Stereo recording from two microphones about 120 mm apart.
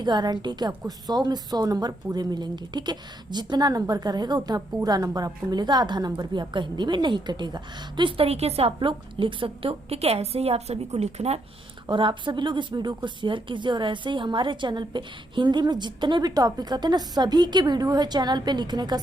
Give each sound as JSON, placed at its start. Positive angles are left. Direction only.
{"t": 0.0, "sound": "speech", "side_deg": -35}
{"t": 11.9, "sound": "speech", "side_deg": -40}